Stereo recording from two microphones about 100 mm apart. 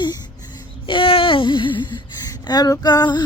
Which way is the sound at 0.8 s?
60° left (ahead or behind).